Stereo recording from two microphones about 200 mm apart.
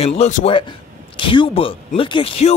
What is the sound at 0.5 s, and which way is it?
Speech, 25° left (ahead or behind).